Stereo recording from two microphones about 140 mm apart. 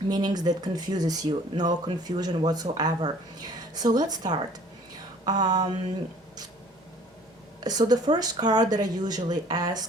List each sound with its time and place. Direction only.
0.1 s speech: 30° right (ahead or behind)
5.2 s mantra: 30° right (ahead or behind)
7.6 s speech: 30° right (ahead or behind)